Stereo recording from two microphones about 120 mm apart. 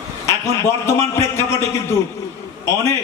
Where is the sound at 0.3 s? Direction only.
25° left (ahead or behind).